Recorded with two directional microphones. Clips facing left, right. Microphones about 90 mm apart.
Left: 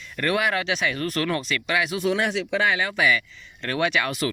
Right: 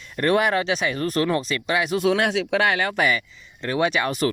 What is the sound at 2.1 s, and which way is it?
Speech, 80° right.